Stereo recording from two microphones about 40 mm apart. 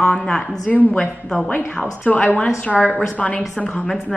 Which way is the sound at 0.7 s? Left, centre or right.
Left.